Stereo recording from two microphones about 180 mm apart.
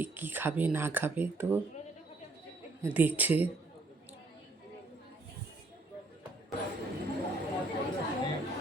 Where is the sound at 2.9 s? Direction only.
10° right (ahead or behind).